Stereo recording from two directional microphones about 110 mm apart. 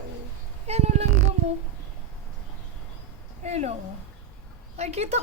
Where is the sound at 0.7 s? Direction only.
75° right (ahead or behind).